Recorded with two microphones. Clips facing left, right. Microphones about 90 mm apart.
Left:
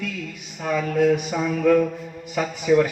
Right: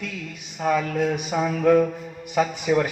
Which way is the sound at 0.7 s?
20° right (ahead or behind).